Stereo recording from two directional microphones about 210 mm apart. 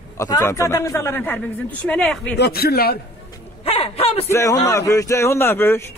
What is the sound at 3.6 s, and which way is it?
Speech, 30° left (ahead or behind).